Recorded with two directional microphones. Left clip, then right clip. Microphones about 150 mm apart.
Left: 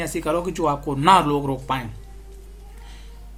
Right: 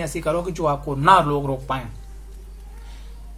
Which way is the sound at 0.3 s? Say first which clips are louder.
Right 1 dB; 40° left (ahead or behind).